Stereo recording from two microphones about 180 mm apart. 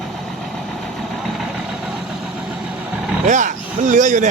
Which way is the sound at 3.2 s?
45° right (ahead or behind).